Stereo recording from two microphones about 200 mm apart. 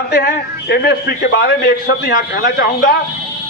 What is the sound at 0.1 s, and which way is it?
A man's voice, 50° left (ahead or behind).